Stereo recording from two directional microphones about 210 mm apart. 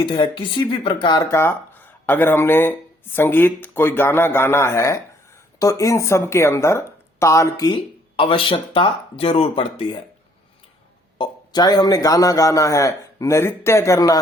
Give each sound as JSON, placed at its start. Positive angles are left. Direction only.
{"t": 0.0, "sound": "speech", "side_deg": 20}
{"t": 1.2, "sound": "speech", "side_deg": 10}
{"t": 11.2, "sound": "speech", "side_deg": 20}